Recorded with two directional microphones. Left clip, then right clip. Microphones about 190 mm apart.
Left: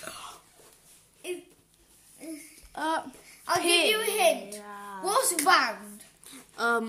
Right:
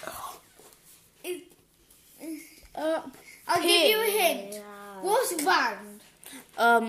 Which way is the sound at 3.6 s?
5° left (ahead or behind).